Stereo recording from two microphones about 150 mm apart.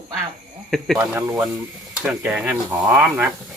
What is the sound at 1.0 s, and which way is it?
Speech, 15° right (ahead or behind).